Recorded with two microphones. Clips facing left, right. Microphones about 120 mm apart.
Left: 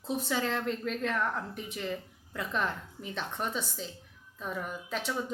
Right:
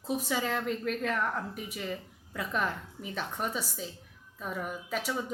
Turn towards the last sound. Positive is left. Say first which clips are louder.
# even
turn(degrees=-5)  # may be behind; listen again after turning